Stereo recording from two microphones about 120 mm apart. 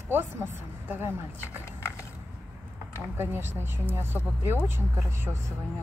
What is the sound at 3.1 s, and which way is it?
Speech, 20° right (ahead or behind).